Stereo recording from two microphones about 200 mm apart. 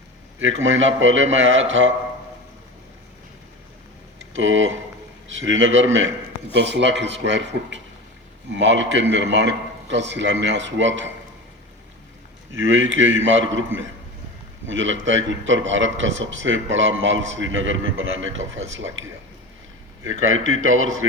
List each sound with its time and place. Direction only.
0.3 s a man's voice: 75° right (ahead or behind)
4.2 s a man's voice: 70° right (ahead or behind)
6.5 s a man's voice: 60° right (ahead or behind)
12.5 s a man's voice: 70° right (ahead or behind)
14.7 s a man's voice: 70° right (ahead or behind)
20.1 s a man's voice: 90° right